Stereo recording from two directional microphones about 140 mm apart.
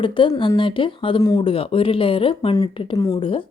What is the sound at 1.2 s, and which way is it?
Speech, 25° left (ahead or behind).